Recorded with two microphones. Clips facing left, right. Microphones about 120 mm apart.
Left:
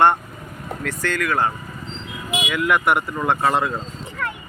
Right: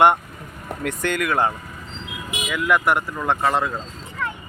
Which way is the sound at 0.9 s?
20° right (ahead or behind).